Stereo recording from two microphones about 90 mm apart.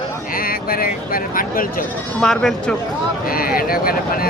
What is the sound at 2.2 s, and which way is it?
Speech, 5° left (ahead or behind).